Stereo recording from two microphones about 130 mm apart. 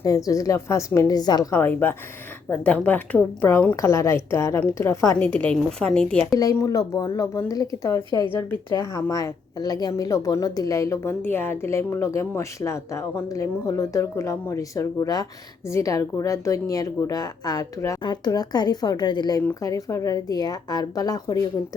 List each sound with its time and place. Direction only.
0.3 s a woman's voice: 25° left (ahead or behind)
1.5 s a woman's voice: 15° left (ahead or behind)
6.3 s a woman's voice: 25° left (ahead or behind)